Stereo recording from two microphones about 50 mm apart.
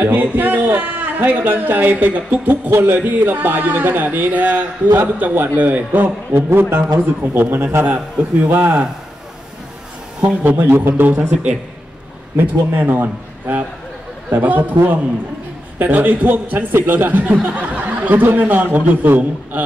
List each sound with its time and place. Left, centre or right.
0.0 s a man's voice: right
10.2 s a man's voice: right
10.6 s speech: right
12.4 s a man's voice: right
15.8 s a man's voice: right